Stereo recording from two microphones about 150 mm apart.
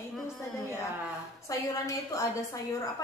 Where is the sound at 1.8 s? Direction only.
20° left (ahead or behind).